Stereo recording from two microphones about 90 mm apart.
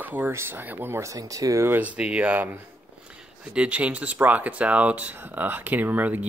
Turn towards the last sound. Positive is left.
turn(degrees=-20)  # may be behind; listen again after turning